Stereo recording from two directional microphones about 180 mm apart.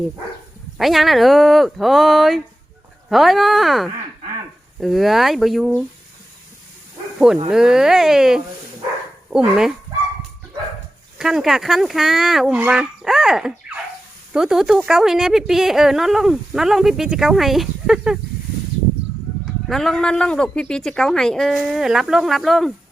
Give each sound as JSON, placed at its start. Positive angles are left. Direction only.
{"t": 0.8, "sound": "a woman's voice", "side_deg": 0}
{"t": 7.5, "sound": "a woman's voice", "side_deg": -5}
{"t": 11.2, "sound": "a woman's voice", "side_deg": -5}
{"t": 19.6, "sound": "a woman's voice", "side_deg": 0}